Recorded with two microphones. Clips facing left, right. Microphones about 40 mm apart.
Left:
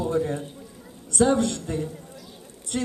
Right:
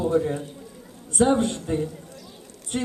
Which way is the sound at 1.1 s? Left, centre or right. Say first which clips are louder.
Even; right.